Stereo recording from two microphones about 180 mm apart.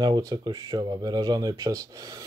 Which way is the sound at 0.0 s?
20° right (ahead or behind).